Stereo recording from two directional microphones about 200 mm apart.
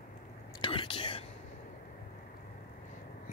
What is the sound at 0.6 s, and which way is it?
Whispering, 25° left (ahead or behind).